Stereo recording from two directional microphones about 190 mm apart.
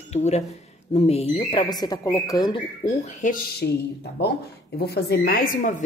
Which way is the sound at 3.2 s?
50° left (ahead or behind).